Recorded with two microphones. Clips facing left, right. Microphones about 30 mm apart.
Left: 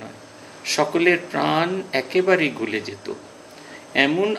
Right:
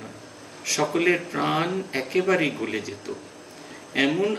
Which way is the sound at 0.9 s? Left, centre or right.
Left.